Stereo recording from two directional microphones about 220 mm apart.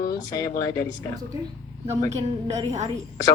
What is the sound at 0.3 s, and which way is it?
Speech, 15° left (ahead or behind).